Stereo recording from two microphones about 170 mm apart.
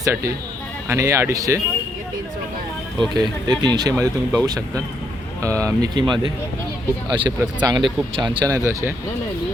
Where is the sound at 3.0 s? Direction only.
25° right (ahead or behind).